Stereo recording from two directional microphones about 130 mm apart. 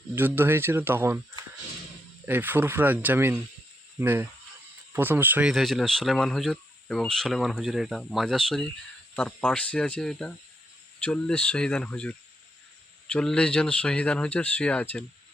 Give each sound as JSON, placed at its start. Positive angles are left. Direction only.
{"t": 0.2, "sound": "speech", "side_deg": -15}
{"t": 2.2, "sound": "speech", "side_deg": -15}
{"t": 5.5, "sound": "speech", "side_deg": 0}